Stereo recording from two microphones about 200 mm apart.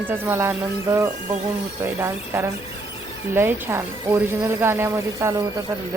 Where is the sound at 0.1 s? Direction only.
10° right (ahead or behind).